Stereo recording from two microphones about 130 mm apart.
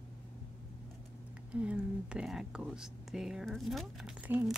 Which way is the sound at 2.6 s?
5° right (ahead or behind).